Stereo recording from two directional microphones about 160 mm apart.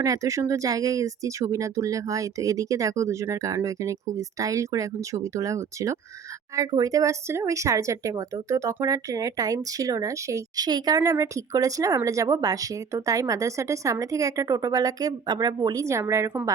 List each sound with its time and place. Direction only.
0.0 s speech: 20° right (ahead or behind)